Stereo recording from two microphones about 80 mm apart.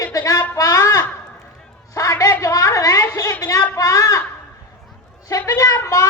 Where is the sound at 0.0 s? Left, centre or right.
Left.